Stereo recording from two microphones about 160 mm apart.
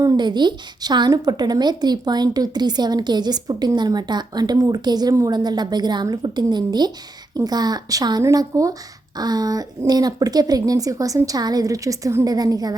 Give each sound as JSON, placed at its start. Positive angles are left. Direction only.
{"t": 0.0, "sound": "a woman's voice", "side_deg": -30}